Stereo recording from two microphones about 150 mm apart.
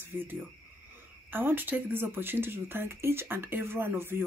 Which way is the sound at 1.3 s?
15° right (ahead or behind).